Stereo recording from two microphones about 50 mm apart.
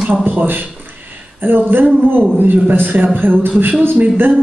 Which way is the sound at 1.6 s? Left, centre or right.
Right.